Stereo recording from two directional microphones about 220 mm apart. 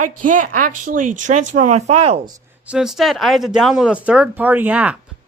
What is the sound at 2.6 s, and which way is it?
Speech, 5° right (ahead or behind).